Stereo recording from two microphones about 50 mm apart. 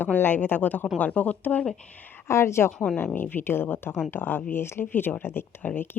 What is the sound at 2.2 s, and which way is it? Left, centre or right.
Speech, left.